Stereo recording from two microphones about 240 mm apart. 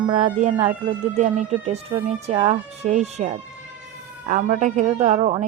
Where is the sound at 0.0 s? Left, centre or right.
Right.